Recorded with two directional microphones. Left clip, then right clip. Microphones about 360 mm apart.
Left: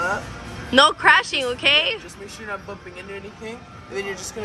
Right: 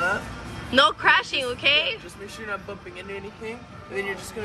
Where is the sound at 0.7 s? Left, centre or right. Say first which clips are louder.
Left 4 dB; centre.